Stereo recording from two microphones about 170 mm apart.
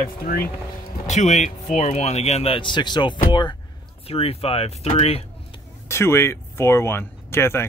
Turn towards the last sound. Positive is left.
turn(degrees=15)  # may be behind; listen again after turning